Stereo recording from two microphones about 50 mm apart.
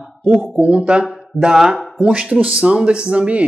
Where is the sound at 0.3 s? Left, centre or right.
Right.